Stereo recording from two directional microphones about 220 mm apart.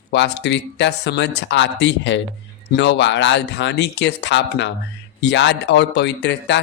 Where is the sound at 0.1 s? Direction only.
55° left (ahead or behind).